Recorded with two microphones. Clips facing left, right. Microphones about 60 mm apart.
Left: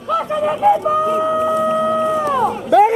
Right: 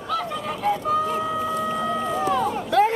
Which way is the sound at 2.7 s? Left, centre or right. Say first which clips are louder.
Left 8 dB; centre.